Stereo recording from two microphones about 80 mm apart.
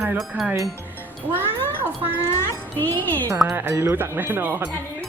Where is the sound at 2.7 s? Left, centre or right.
Left.